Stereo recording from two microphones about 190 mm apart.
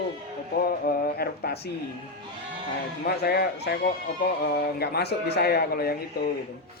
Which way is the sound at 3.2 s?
55° left (ahead or behind).